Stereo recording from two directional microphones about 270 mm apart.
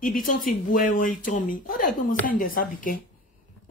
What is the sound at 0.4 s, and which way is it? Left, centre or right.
A woman's voice, left.